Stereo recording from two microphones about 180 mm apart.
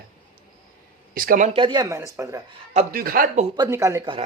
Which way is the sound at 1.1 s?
50° right (ahead or behind).